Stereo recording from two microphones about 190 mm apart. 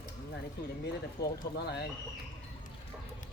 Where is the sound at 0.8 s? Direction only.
55° left (ahead or behind).